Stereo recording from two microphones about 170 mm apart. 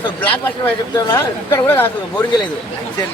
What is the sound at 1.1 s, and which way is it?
Speech, 15° left (ahead or behind).